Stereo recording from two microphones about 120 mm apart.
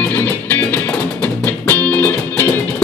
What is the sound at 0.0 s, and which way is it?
Music, 15° left (ahead or behind).